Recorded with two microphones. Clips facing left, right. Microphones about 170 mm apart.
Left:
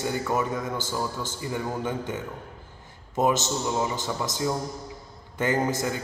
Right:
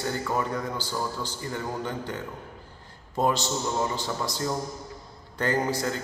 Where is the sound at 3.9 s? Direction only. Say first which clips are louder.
Left 1 dB; 20° left (ahead or behind).